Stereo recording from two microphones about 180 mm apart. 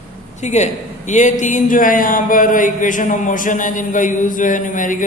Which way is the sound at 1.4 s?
45° left (ahead or behind).